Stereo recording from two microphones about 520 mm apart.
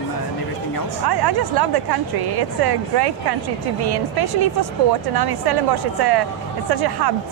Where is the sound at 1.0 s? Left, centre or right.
Right.